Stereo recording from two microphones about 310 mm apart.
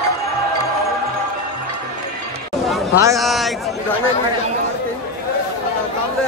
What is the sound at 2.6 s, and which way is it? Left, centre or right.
Speech, centre.